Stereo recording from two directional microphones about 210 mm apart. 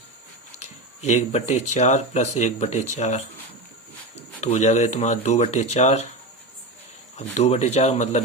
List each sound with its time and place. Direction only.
0.6 s speech: 30° left (ahead or behind)
7.2 s speech: 30° left (ahead or behind)